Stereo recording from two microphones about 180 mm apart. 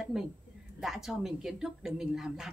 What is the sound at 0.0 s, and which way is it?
A woman's voice, 5° right (ahead or behind).